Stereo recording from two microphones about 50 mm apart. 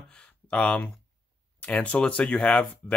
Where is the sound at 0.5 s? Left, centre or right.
Left.